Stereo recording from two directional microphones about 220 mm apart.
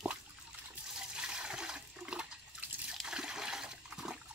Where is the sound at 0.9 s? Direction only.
5° right (ahead or behind).